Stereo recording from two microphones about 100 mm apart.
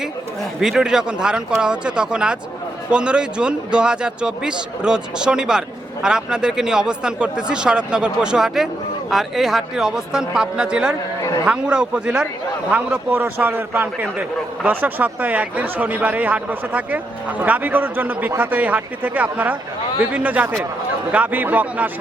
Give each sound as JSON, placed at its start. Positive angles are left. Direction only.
{"t": 0.6, "sound": "a man's voice", "side_deg": -5}